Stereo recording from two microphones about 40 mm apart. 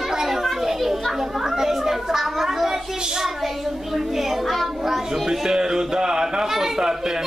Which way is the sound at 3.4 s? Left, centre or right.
Centre.